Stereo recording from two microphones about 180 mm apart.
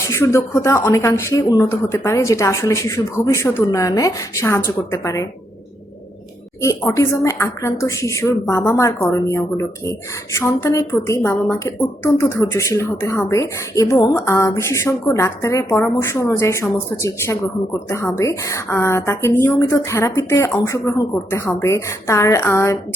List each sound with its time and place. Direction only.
0.0 s a woman's voice: 15° left (ahead or behind)
6.6 s a woman's voice: 15° left (ahead or behind)